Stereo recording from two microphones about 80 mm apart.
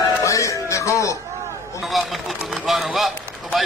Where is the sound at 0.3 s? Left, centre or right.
Left.